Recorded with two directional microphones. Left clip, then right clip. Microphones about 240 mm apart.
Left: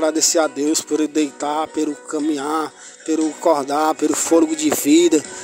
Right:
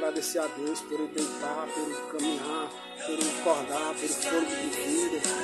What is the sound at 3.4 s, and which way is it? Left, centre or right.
Speech, left.